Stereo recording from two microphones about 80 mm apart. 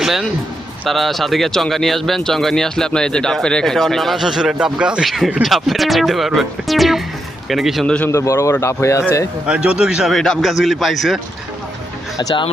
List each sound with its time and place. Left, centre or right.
0.0 s a man's voice: centre
5.0 s speech: centre
8.1 s a man's voice: left
9.5 s speech: centre